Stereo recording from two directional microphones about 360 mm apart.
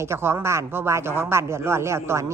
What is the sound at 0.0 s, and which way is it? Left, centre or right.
Speech, centre.